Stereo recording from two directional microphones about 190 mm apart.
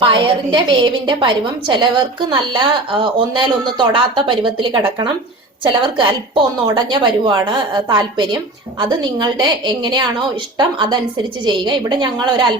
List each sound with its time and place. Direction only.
0.0 s a woman's voice: 25° right (ahead or behind)
3.0 s a woman's voice: 25° right (ahead or behind)